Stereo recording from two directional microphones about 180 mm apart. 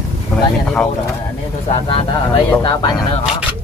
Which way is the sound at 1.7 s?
30° left (ahead or behind).